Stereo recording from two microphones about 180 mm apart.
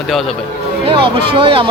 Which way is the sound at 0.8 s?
30° right (ahead or behind).